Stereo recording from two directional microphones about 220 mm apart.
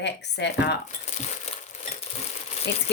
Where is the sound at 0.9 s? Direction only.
30° left (ahead or behind).